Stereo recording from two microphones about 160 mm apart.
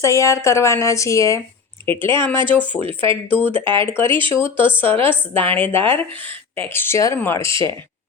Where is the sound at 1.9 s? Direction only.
30° right (ahead or behind).